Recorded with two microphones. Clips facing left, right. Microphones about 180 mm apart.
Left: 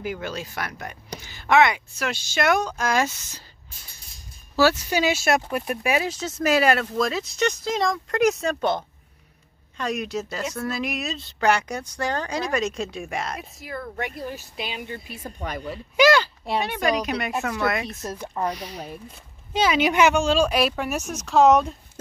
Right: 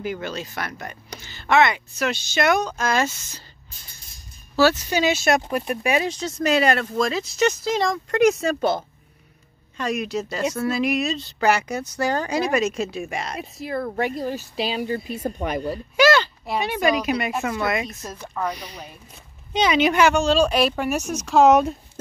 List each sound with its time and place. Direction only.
0.0 s speech: 10° left (ahead or behind)
4.6 s speech: 10° left (ahead or behind)
13.4 s speech: 30° right (ahead or behind)
15.2 s speech: 50° right (ahead or behind)
16.0 s speech: 15° left (ahead or behind)
16.5 s speech: 5° right (ahead or behind)
18.1 s speech: 15° left (ahead or behind)
18.5 s speech: centre (ahead or behind)
19.9 s speech: 15° left (ahead or behind); by 21.7 s 5° right (ahead or behind)